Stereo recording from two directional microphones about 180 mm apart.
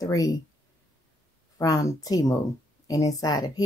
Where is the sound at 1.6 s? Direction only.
20° left (ahead or behind).